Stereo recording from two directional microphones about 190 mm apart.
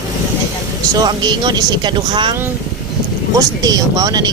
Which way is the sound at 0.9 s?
20° right (ahead or behind).